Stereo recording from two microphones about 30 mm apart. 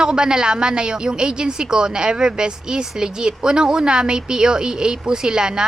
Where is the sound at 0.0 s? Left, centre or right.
Right.